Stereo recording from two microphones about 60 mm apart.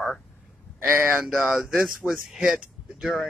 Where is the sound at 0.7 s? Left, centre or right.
Right.